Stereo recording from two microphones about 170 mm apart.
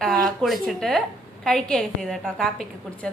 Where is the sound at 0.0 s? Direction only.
Centre (ahead or behind).